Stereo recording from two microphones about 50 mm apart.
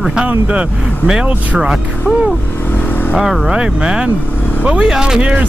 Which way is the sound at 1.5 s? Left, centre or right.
Centre.